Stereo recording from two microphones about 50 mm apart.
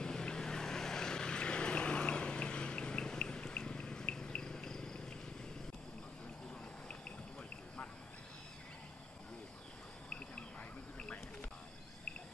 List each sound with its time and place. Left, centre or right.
0.0 s vehicle: centre